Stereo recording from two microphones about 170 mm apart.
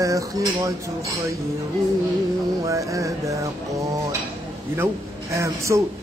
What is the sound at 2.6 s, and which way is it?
Speech, 20° right (ahead or behind).